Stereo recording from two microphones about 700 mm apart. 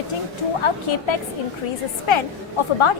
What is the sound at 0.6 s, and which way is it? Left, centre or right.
Speech, left.